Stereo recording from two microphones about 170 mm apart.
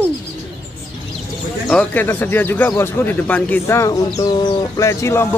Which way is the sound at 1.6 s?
10° left (ahead or behind).